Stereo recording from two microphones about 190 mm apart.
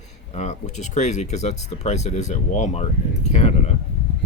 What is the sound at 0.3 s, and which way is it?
Speech, 40° left (ahead or behind).